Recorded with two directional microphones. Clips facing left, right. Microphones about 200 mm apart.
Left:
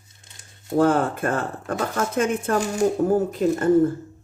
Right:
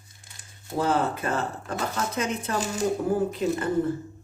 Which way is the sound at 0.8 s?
50° left (ahead or behind).